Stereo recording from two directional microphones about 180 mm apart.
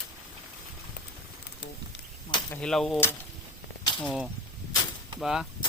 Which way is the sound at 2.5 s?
5° left (ahead or behind).